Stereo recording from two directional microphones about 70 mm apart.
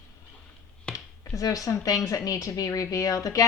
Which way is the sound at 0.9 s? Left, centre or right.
Left.